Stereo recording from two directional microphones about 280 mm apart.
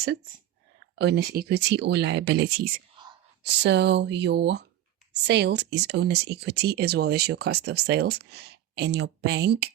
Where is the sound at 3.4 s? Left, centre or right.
Right.